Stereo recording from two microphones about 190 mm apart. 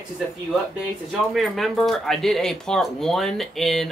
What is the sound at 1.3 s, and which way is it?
Speech, centre (ahead or behind).